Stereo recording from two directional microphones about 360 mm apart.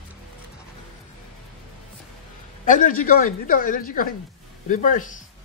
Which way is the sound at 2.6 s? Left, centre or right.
Left.